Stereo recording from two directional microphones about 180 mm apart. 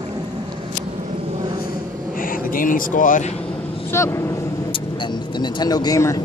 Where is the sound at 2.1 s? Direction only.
50° left (ahead or behind).